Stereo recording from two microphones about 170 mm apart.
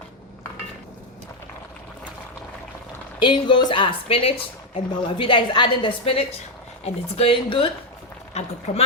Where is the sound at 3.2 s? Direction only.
30° left (ahead or behind).